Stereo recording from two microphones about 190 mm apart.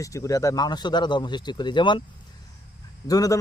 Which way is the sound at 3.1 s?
20° left (ahead or behind).